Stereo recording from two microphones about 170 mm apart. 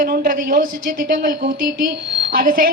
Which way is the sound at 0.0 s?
60° right (ahead or behind).